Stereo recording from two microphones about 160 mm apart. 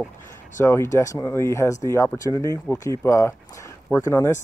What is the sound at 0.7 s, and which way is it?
Speech, 15° left (ahead or behind).